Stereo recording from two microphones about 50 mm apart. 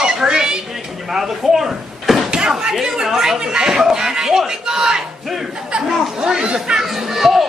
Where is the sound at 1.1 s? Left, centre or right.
Centre.